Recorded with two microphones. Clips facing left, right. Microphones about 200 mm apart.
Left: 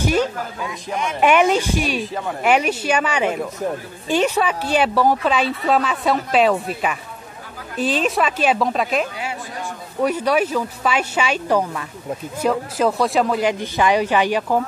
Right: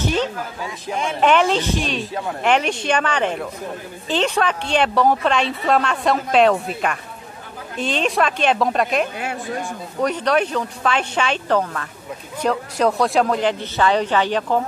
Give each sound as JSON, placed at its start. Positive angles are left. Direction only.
{"t": 0.0, "sound": "speech", "side_deg": 10}
{"t": 9.2, "sound": "speech", "side_deg": -50}
{"t": 10.0, "sound": "speech", "side_deg": 5}